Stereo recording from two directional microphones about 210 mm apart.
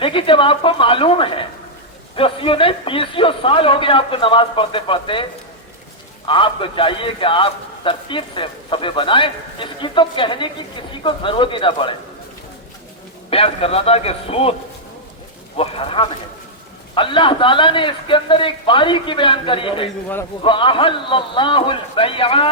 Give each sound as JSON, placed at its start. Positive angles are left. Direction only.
{"t": 0.0, "sound": "a man's voice", "side_deg": 25}
{"t": 6.2, "sound": "a man's voice", "side_deg": 25}
{"t": 13.3, "sound": "a man's voice", "side_deg": 25}
{"t": 15.5, "sound": "a man's voice", "side_deg": 25}